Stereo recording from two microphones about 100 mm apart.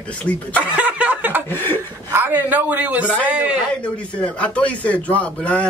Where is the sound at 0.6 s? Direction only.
15° right (ahead or behind).